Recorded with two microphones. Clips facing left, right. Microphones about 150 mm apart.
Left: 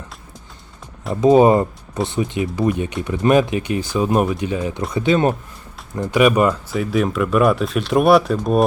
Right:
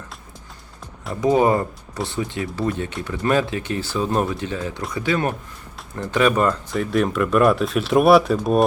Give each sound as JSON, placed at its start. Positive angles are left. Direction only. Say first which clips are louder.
{"t": 1.2, "sound": "speech", "louder": "left 5 dB", "side_deg": 20}
{"t": 6.0, "sound": "speech", "louder": "left 4 dB", "side_deg": 10}